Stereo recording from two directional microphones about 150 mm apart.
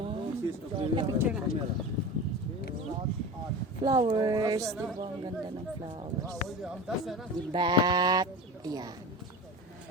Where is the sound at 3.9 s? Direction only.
30° right (ahead or behind).